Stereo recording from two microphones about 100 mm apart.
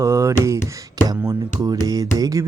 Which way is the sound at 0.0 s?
30° right (ahead or behind).